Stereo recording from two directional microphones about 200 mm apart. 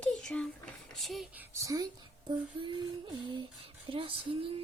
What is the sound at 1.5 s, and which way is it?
Speech, 15° right (ahead or behind).